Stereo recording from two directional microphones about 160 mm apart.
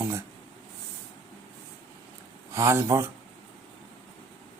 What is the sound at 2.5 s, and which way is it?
Speech, 20° right (ahead or behind).